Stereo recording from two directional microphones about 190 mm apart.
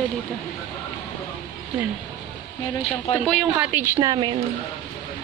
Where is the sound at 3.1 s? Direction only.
5° left (ahead or behind).